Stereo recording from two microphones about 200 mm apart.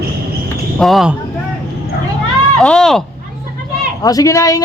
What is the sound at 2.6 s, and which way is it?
Speech, 5° left (ahead or behind).